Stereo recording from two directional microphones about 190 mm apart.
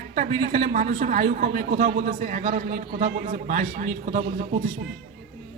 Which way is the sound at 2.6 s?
50° right (ahead or behind).